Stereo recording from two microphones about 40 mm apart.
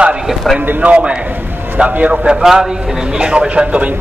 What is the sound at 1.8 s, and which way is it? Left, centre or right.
Speech, right.